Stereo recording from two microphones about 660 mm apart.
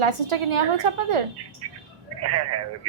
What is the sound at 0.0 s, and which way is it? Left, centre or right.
A woman's voice, right.